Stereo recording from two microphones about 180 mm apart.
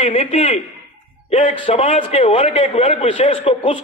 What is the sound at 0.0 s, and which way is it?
A man's voice, 35° left (ahead or behind).